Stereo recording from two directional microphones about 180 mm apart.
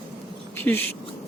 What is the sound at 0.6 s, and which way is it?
Speech, 10° left (ahead or behind).